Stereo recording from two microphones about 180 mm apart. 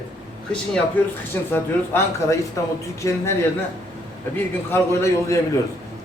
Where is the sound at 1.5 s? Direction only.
15° left (ahead or behind).